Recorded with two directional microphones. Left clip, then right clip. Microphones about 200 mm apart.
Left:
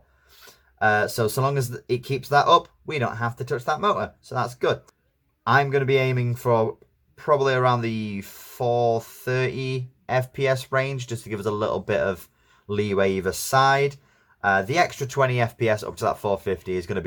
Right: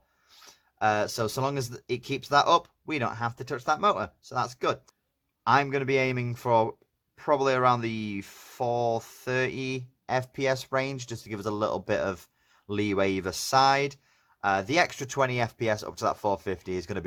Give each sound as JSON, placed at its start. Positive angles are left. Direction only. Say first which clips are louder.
{"t": 0.4, "sound": "speech", "louder": "left 4 dB", "side_deg": -30}